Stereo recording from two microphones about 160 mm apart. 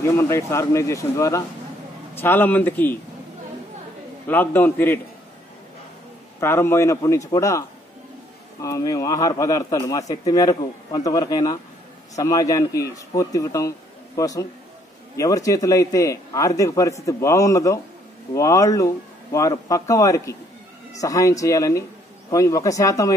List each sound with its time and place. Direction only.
0.0 s speech: 15° left (ahead or behind)
4.3 s speech: 10° left (ahead or behind)
6.4 s speech: 15° left (ahead or behind)